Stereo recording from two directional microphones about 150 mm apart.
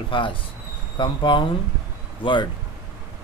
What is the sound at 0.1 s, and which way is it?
Speech, 35° left (ahead or behind).